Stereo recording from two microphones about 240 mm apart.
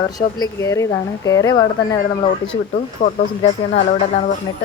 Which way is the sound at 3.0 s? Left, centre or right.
Left.